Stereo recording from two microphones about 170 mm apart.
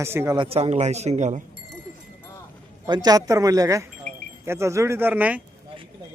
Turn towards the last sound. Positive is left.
turn(degrees=-10)  # may be behind; listen again after turning